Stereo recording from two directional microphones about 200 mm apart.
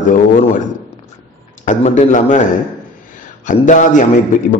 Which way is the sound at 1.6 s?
35° left (ahead or behind).